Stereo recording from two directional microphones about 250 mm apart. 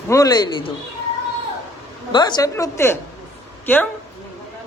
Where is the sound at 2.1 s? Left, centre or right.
Centre.